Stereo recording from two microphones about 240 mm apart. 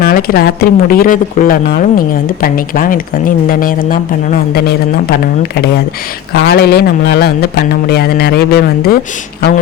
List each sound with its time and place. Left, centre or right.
0.0 s speech: left
6.3 s speech: left